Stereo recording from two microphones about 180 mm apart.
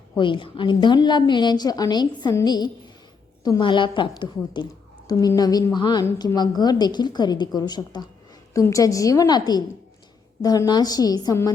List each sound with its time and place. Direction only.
0.2 s a woman's voice: 25° left (ahead or behind)